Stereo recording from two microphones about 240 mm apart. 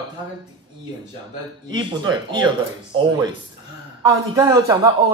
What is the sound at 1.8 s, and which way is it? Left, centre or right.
Speech, centre.